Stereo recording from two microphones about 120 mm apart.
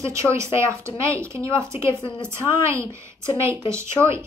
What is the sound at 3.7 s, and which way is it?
Speech, 20° right (ahead or behind).